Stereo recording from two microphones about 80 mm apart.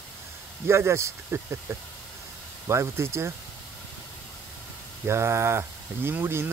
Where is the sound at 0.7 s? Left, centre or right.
Right.